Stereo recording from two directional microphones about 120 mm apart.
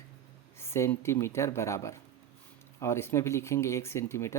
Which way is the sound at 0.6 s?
20° left (ahead or behind).